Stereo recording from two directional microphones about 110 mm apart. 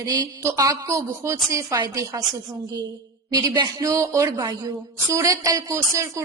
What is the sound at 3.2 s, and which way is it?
A woman's voice, 35° right (ahead or behind).